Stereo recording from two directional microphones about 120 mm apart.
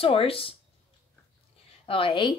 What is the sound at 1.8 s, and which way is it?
Speech, 45° left (ahead or behind).